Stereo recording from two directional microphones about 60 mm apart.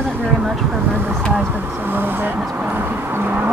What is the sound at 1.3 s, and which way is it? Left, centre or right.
Speech, right.